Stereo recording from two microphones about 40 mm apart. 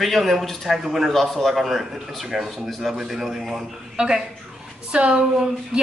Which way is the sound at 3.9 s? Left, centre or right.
Right.